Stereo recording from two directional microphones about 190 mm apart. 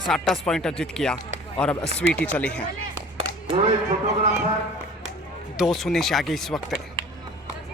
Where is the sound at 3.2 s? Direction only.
30° right (ahead or behind).